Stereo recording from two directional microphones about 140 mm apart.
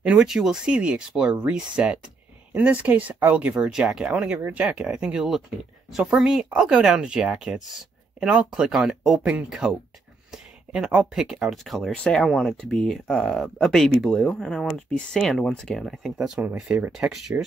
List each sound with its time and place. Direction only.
0.0 s speech: 5° right (ahead or behind)